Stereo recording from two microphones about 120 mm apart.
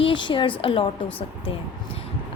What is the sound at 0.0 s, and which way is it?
Speech, 45° left (ahead or behind).